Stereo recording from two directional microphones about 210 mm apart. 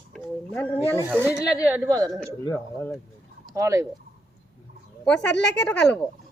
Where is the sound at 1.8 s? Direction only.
15° right (ahead or behind).